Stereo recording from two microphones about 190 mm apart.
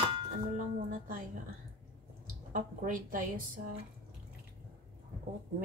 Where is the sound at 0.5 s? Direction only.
45° right (ahead or behind).